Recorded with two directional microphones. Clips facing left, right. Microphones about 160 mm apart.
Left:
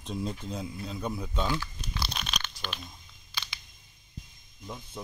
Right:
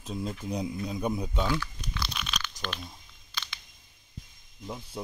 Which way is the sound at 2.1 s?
40° left (ahead or behind).